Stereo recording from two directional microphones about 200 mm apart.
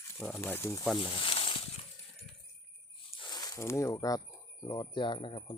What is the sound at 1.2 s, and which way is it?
Snake, 25° left (ahead or behind).